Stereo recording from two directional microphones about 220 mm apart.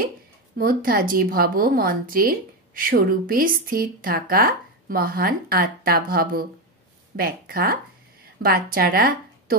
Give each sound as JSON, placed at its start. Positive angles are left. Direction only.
{"t": 0.6, "sound": "a woman's voice", "side_deg": -40}